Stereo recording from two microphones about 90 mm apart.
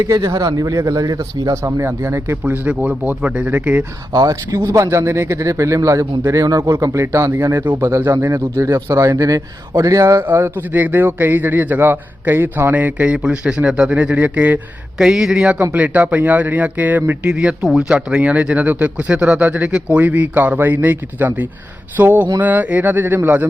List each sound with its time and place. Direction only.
0.1 s speech: 40° right (ahead or behind)
2.4 s speech: 15° right (ahead or behind)
4.1 s speech: 40° right (ahead or behind)
10.2 s a man's voice: 25° right (ahead or behind)
14.9 s a man's voice: 5° right (ahead or behind); by 23.5 s 20° right (ahead or behind)